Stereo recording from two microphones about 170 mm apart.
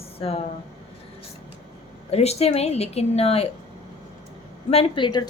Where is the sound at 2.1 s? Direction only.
40° left (ahead or behind).